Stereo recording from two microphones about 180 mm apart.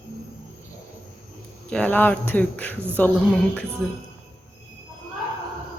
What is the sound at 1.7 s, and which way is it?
Speech, 10° left (ahead or behind).